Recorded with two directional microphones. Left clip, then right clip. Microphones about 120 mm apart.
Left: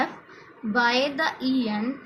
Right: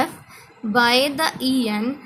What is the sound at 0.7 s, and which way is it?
A woman's voice, 75° right (ahead or behind).